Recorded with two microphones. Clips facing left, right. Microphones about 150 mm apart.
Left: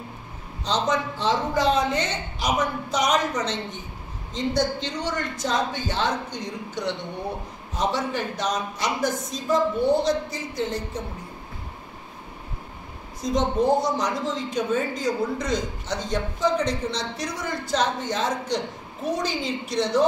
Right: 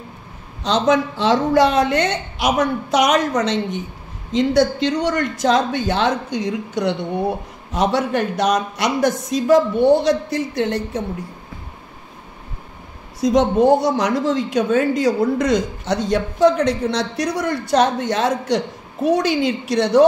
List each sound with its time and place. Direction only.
0.7 s speech: 85° right
4.3 s speech: 90° right; by 11.0 s 70° right (ahead or behind)
13.2 s speech: 75° right (ahead or behind)